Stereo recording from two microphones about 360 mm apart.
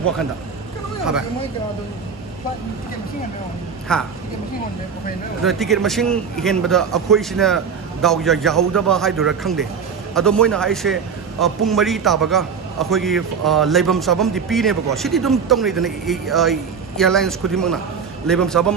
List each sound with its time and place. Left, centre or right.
3.9 s speech: centre
5.4 s speech: centre